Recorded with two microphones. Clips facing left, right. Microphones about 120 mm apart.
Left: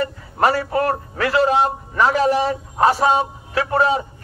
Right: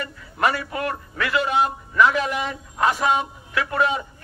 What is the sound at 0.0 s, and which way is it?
A man's voice, 35° left (ahead or behind).